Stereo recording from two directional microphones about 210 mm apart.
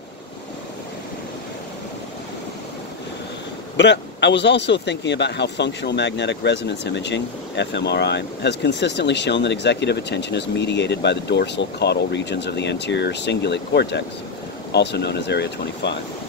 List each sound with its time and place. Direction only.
3.7 s speech: 55° left (ahead or behind)